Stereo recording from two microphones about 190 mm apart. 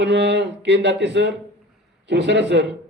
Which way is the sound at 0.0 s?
65° right (ahead or behind).